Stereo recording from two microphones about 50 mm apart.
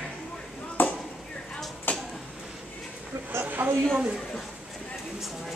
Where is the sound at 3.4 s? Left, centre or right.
Right.